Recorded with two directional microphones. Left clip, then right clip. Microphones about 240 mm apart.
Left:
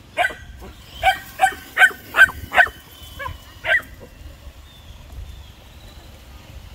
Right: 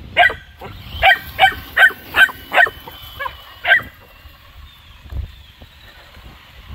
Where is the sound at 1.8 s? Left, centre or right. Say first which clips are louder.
Even; right.